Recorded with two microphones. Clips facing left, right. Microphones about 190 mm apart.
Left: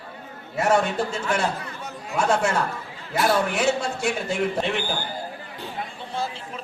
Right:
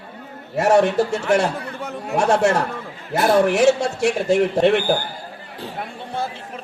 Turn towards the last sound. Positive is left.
turn(degrees=-55)  # may be behind; listen again after turning